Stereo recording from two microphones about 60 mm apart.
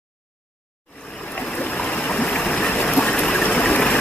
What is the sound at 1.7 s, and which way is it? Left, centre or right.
Stream, centre.